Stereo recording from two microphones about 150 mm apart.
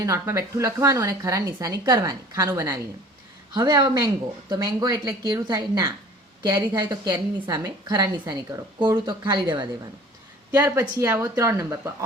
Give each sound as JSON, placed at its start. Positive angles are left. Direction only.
{"t": 0.0, "sound": "a woman's voice", "side_deg": -20}
{"t": 10.5, "sound": "a woman's voice", "side_deg": -20}